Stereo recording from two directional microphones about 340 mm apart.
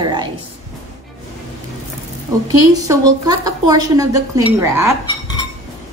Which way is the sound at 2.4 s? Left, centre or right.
Centre.